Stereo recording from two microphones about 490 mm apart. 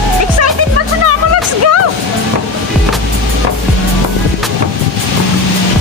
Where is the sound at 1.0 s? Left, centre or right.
Right.